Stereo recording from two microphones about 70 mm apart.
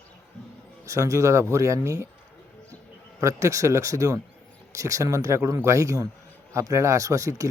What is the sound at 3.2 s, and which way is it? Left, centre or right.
Speech, right.